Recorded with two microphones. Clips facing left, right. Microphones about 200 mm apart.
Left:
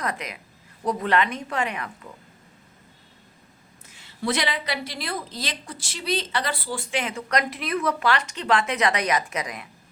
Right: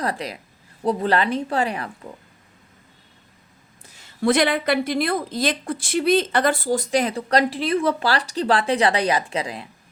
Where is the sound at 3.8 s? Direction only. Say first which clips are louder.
Right 7 dB; 40° right (ahead or behind).